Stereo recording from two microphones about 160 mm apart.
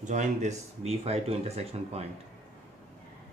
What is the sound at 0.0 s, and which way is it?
Speech, 50° right (ahead or behind).